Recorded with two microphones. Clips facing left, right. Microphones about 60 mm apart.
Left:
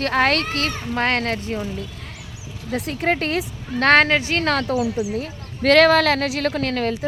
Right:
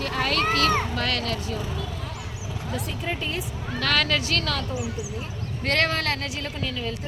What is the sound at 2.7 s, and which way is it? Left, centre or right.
Speech, left.